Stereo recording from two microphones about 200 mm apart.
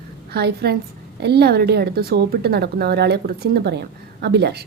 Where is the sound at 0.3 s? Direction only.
55° right (ahead or behind).